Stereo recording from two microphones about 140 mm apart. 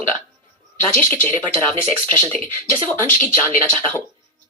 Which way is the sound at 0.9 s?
15° left (ahead or behind).